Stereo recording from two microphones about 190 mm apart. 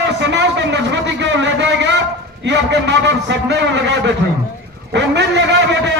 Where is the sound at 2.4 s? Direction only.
65° right (ahead or behind).